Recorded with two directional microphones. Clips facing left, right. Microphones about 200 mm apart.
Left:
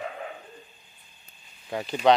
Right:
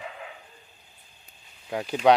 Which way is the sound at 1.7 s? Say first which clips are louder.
Right 1 dB; 5° right (ahead or behind).